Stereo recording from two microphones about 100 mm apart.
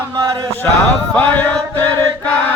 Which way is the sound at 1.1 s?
15° left (ahead or behind).